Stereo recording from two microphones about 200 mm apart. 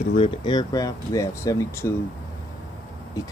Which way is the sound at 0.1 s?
25° left (ahead or behind).